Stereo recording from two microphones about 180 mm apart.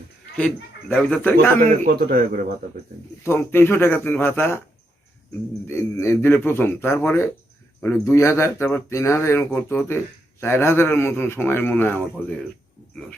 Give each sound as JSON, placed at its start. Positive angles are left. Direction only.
{"t": 0.3, "sound": "speech", "side_deg": 5}
{"t": 1.8, "sound": "speech", "side_deg": -60}
{"t": 3.2, "sound": "speech", "side_deg": 15}
{"t": 5.6, "sound": "speech", "side_deg": 15}